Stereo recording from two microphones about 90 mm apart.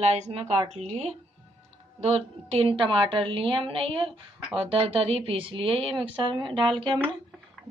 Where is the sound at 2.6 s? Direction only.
75° right (ahead or behind); by 6.0 s 90° right.